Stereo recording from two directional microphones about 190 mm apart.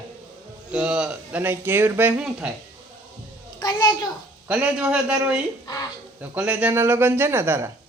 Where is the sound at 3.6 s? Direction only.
20° left (ahead or behind).